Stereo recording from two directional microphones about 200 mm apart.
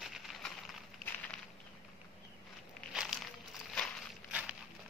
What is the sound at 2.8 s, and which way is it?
Walk, centre (ahead or behind).